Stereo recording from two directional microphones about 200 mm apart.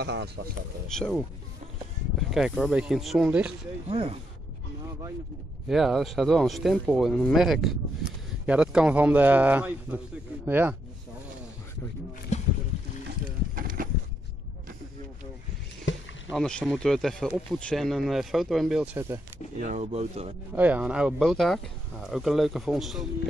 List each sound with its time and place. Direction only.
0.0 s speech: 55° right (ahead or behind)
0.9 s speech: centre (ahead or behind)
2.3 s speech: centre (ahead or behind)
3.9 s speech: 25° right (ahead or behind)
5.7 s a man's voice: centre (ahead or behind)
12.3 s boat: 35° left (ahead or behind)
13.6 s a sound: 45° right (ahead or behind)
15.9 s rowboat: 70° left (ahead or behind)
16.3 s speech: 5° left (ahead or behind)
19.6 s speech: 35° right (ahead or behind)
20.5 s speech: 10° right (ahead or behind)